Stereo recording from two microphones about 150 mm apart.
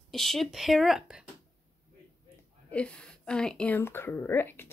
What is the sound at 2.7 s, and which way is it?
Speech, 5° left (ahead or behind).